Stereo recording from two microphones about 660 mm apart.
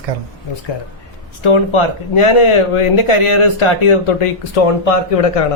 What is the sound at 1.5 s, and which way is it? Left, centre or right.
Speech, left.